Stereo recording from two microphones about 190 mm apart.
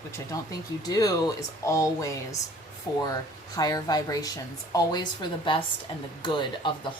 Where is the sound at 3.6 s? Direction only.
20° left (ahead or behind).